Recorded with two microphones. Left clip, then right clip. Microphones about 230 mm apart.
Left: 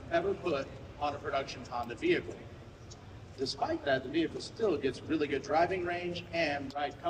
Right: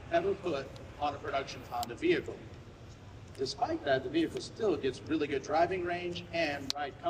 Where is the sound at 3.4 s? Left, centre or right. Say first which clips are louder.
Even; centre.